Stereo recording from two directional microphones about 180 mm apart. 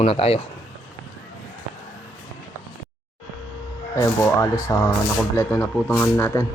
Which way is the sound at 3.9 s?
15° left (ahead or behind).